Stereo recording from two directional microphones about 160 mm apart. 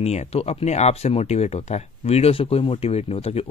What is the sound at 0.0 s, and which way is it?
Speech, 40° left (ahead or behind).